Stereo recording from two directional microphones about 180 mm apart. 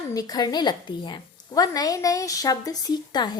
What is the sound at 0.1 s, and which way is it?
A woman's voice, 20° left (ahead or behind).